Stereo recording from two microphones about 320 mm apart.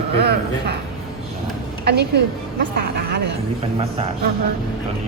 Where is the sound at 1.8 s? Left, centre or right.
Right.